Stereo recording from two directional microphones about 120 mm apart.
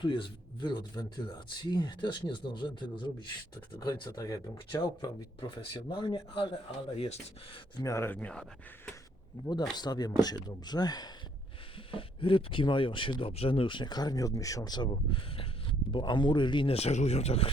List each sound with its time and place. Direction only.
0.0 s speech: 40° left (ahead or behind)
6.9 s speech: 55° left (ahead or behind)
7.8 s speech: 25° left (ahead or behind); by 8.4 s 10° left (ahead or behind)
9.7 s speech: 35° left (ahead or behind)
11.9 s speech: 45° left (ahead or behind)
16.7 s speech: 65° left (ahead or behind)